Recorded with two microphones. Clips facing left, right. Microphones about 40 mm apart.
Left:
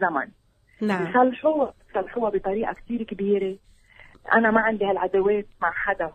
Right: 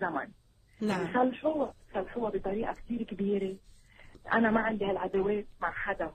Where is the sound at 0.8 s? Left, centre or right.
Left.